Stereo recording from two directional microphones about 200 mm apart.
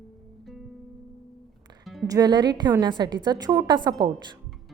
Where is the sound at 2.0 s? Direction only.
20° right (ahead or behind).